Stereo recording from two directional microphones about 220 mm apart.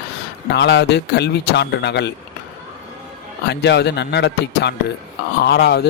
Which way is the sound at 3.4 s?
50° left (ahead or behind).